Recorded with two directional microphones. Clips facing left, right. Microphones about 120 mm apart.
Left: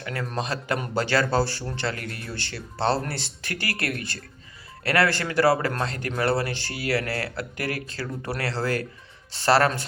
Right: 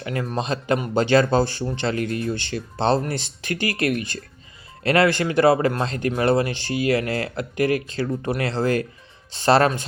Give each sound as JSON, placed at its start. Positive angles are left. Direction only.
{"t": 0.0, "sound": "speech", "side_deg": -20}